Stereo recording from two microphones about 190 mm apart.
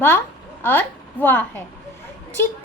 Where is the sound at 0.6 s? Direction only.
10° left (ahead or behind).